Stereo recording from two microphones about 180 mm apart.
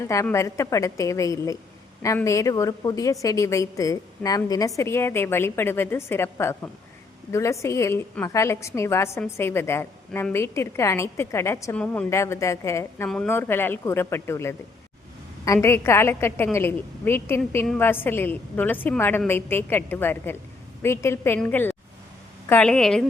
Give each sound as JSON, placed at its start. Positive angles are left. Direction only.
{"t": 0.1, "sound": "a woman's voice", "side_deg": 15}